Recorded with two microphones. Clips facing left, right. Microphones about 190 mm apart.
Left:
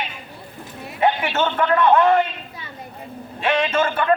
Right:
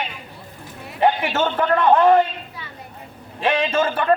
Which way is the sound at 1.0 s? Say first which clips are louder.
Right 1 dB; 40° right (ahead or behind).